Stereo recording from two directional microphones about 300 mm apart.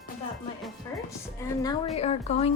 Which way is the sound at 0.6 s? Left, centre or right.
Centre.